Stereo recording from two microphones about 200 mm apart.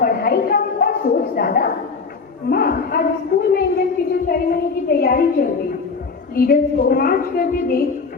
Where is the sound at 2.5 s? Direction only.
50° left (ahead or behind).